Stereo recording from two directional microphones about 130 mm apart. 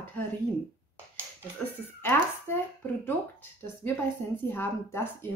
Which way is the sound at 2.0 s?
15° left (ahead or behind).